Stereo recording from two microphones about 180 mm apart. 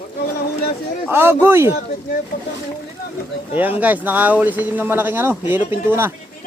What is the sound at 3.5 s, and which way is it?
Speech, 10° right (ahead or behind).